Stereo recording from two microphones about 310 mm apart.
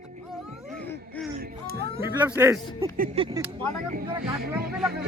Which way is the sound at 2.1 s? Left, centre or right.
Centre.